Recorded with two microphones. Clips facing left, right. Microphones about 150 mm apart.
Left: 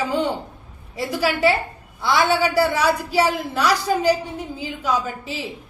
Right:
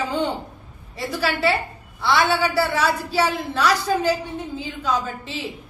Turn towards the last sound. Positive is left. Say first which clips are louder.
# left 1 dB
turn(degrees=10)  # may be behind; listen again after turning